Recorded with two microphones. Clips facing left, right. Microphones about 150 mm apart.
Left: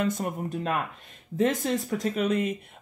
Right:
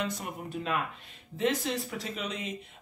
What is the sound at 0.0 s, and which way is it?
Speech, 45° left (ahead or behind).